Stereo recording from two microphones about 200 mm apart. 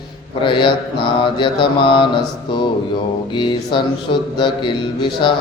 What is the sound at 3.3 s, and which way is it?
Mantra, 25° left (ahead or behind).